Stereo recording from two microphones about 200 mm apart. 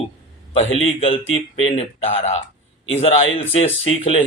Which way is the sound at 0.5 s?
30° left (ahead or behind).